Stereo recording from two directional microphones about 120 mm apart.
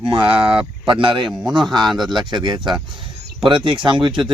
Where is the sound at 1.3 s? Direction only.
Centre (ahead or behind).